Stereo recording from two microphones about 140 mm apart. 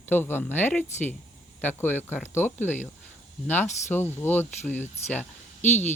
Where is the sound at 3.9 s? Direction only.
15° left (ahead or behind).